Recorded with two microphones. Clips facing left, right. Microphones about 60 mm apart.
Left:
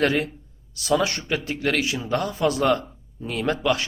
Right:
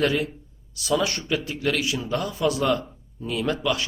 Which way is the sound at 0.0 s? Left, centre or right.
Left.